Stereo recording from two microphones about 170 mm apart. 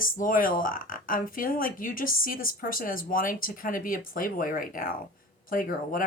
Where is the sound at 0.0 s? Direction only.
55° left (ahead or behind).